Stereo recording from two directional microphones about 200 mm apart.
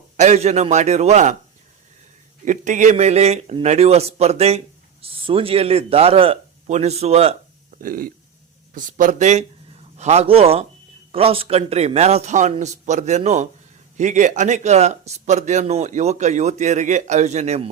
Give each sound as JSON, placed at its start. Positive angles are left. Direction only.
{"t": 0.2, "sound": "speech", "side_deg": -35}
{"t": 2.4, "sound": "a man's voice", "side_deg": -40}
{"t": 7.8, "sound": "speech", "side_deg": -45}